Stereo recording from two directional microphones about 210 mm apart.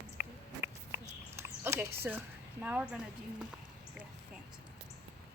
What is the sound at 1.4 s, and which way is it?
Speech, 10° right (ahead or behind).